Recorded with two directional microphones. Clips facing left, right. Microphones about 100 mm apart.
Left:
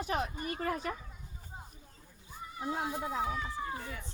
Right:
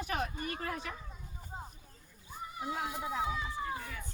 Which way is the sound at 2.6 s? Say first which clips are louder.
Left 2 dB; 30° left (ahead or behind).